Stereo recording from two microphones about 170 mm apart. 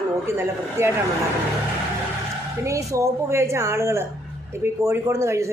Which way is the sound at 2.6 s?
20° right (ahead or behind).